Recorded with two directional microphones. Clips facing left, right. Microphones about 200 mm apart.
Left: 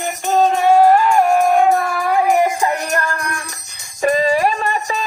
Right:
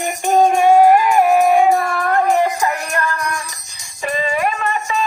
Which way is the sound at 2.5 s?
30° left (ahead or behind).